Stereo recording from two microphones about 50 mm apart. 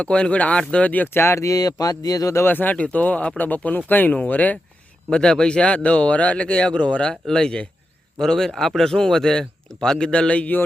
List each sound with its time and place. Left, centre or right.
0.0 s speech: left
1.0 s speech: left
2.4 s speech: left
2.7 s speech: left
5.1 s speech: centre
7.1 s speech: centre
10.1 s speech: left